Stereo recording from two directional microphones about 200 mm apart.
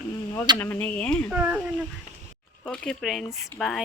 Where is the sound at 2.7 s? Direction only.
Centre (ahead or behind).